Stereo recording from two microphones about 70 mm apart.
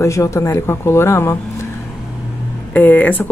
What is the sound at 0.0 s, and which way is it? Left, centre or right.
Speech, left.